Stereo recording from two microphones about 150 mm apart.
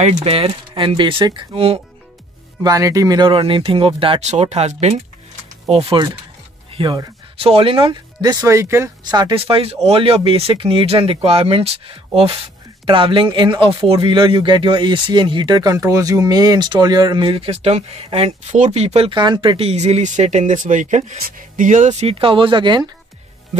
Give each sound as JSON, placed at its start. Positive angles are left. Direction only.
{"t": 0.0, "sound": "speech", "side_deg": -45}
{"t": 2.6, "sound": "speech", "side_deg": -25}
{"t": 6.7, "sound": "music", "side_deg": -35}
{"t": 7.4, "sound": "speech", "side_deg": -40}
{"t": 9.0, "sound": "speech", "side_deg": -30}
{"t": 22.0, "sound": "speech", "side_deg": -35}